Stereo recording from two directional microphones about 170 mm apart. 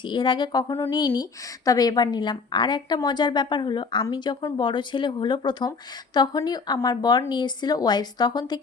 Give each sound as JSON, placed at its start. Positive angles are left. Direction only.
{"t": 0.0, "sound": "speech", "side_deg": 25}